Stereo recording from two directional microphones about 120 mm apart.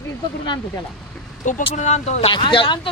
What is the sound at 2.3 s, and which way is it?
Speech, 40° left (ahead or behind).